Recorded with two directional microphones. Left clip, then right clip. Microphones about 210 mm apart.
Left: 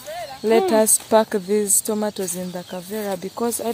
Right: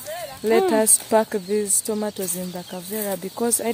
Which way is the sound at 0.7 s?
15° left (ahead or behind).